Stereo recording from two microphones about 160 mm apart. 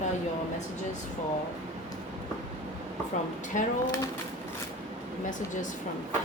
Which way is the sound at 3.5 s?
50° left (ahead or behind).